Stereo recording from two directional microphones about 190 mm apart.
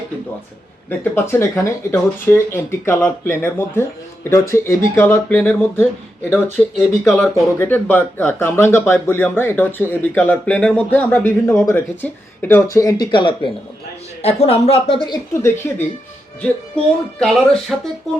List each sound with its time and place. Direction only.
0.9 s speech: 10° left (ahead or behind)
17.2 s speech: centre (ahead or behind)